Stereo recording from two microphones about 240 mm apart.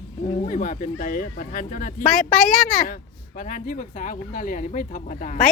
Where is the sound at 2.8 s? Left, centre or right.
Left.